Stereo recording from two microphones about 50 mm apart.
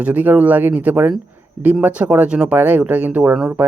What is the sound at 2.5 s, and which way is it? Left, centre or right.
Speech, right.